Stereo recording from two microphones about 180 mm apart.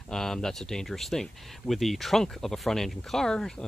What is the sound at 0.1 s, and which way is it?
Speech, 5° left (ahead or behind).